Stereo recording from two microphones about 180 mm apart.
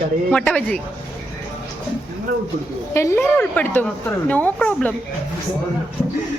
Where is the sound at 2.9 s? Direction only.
15° left (ahead or behind).